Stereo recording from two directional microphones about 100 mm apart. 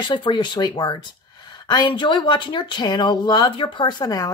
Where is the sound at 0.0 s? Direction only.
55° left (ahead or behind).